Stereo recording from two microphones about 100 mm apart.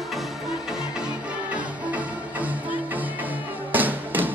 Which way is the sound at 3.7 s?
20° right (ahead or behind).